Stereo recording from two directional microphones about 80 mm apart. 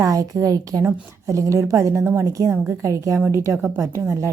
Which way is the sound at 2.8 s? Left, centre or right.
Right.